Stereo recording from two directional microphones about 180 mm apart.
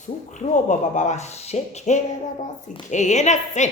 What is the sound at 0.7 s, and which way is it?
A woman's voice, 40° left (ahead or behind).